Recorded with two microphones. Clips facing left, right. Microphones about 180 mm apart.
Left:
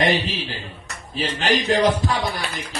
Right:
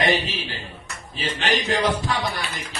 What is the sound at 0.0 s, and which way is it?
Speech, 45° left (ahead or behind).